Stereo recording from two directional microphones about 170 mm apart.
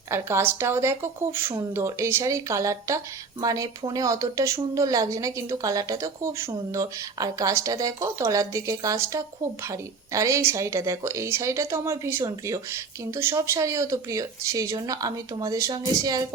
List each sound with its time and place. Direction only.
0.1 s speech: 15° right (ahead or behind)